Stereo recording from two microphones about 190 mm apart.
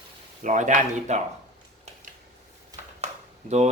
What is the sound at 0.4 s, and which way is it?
Speech, 40° right (ahead or behind).